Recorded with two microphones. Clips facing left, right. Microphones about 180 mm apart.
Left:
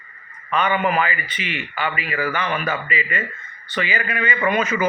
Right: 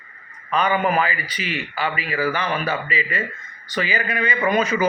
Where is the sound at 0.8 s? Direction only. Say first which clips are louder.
Even; 40° right (ahead or behind).